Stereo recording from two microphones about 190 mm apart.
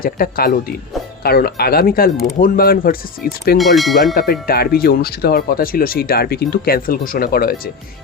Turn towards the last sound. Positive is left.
turn(degrees=50)  # may be behind; listen again after turning